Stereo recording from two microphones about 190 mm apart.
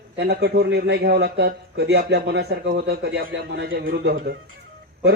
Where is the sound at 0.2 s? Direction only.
60° right (ahead or behind).